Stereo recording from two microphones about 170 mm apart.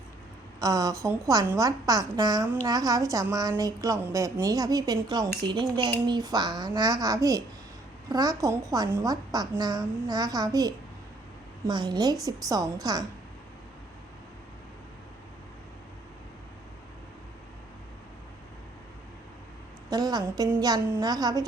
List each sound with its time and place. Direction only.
0.6 s a woman's voice: 20° right (ahead or behind)
19.9 s a woman's voice: 25° right (ahead or behind)